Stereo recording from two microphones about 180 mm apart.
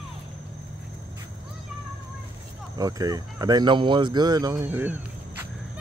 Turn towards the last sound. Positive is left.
turn(degrees=-10)  # may be behind; listen again after turning